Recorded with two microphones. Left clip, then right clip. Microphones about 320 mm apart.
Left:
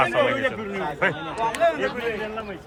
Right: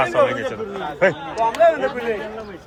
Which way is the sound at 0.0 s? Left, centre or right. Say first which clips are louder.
Right 3 dB; centre.